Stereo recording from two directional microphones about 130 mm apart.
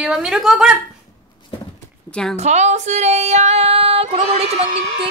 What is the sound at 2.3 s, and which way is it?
Female singing, 60° right (ahead or behind).